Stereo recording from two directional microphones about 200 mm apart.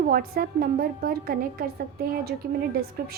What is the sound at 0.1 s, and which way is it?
A woman's voice, 45° right (ahead or behind).